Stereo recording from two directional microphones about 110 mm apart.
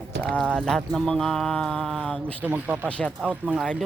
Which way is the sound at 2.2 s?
15° right (ahead or behind).